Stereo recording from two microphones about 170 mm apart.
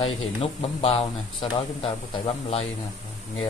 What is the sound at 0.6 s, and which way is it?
A man's voice, 35° left (ahead or behind).